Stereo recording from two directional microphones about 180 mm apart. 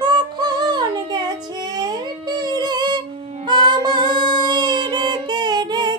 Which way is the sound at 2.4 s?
25° right (ahead or behind).